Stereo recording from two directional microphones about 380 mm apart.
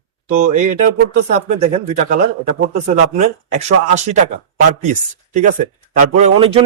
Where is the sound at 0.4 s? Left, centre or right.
Centre.